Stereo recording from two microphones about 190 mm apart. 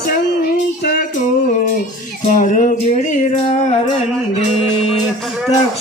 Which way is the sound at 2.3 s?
45° left (ahead or behind).